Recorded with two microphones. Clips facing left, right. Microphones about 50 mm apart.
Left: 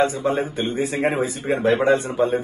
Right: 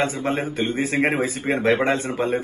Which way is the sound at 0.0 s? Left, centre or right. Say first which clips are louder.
Left 3 dB; right.